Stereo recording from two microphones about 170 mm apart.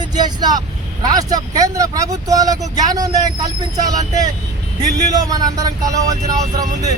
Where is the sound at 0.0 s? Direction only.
25° right (ahead or behind).